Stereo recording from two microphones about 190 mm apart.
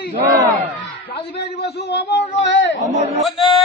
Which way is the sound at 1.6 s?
60° left (ahead or behind).